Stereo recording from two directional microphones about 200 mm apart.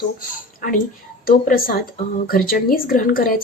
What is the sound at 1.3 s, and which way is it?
Speech, 45° left (ahead or behind).